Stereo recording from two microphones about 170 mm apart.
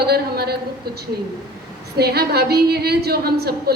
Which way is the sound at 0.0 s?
70° right (ahead or behind).